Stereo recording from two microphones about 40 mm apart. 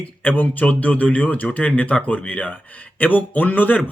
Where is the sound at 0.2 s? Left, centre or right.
Left.